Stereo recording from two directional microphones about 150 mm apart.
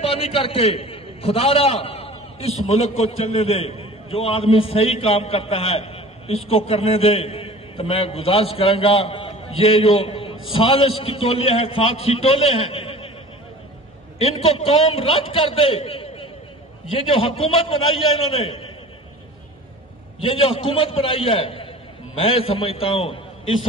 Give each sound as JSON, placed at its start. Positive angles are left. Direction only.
{"t": 0.1, "sound": "a man's voice", "side_deg": 35}
{"t": 14.1, "sound": "a man's voice", "side_deg": 40}
{"t": 20.2, "sound": "a man's voice", "side_deg": 40}